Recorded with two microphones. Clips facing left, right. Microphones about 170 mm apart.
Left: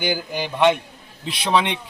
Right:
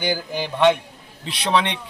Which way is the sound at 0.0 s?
20° left (ahead or behind).